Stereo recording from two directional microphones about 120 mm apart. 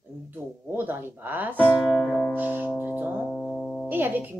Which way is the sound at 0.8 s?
15° right (ahead or behind).